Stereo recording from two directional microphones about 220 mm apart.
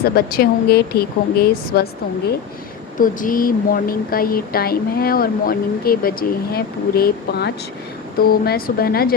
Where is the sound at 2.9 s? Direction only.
40° left (ahead or behind).